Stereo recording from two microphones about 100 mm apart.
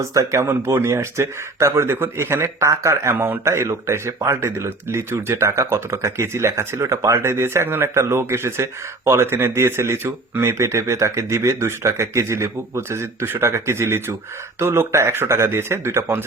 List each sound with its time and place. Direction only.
0.0 s speech: 30° right (ahead or behind)